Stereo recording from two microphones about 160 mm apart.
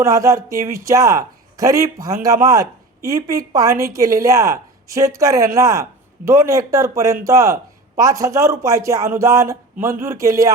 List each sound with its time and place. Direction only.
0.0 s speech: 20° right (ahead or behind)